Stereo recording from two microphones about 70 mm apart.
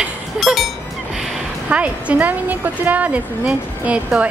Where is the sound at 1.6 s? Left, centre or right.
Centre.